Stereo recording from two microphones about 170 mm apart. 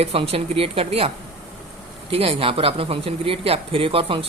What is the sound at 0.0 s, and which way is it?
Speech, 35° right (ahead or behind).